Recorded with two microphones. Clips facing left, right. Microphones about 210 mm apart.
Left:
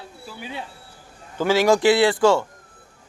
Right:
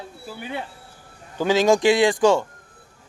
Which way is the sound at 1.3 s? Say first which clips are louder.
Even; 15° right (ahead or behind).